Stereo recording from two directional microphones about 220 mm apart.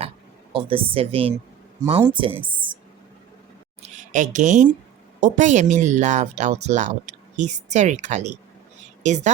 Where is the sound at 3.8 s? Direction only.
35° right (ahead or behind).